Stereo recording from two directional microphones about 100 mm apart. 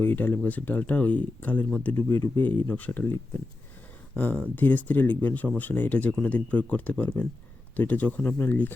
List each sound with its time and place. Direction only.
0.0 s speech: 20° left (ahead or behind)
2.0 s speech: 30° left (ahead or behind)
2.6 s speech: 15° left (ahead or behind)